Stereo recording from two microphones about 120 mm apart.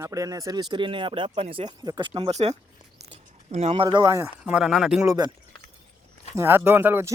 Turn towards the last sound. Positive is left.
turn(degrees=-20)  # may be behind; listen again after turning